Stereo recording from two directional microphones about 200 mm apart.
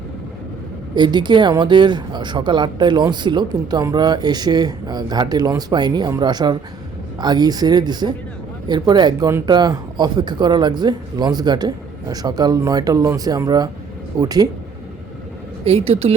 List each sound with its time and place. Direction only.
0.9 s speech: 20° right (ahead or behind)
15.6 s speech: 30° right (ahead or behind)